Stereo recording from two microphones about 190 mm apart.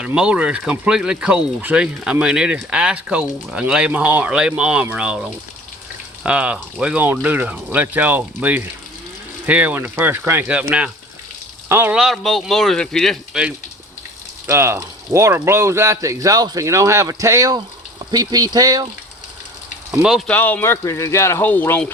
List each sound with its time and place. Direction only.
0.0 s speech: 5° right (ahead or behind)
14.4 s speech: 15° right (ahead or behind)
19.9 s speech: centre (ahead or behind)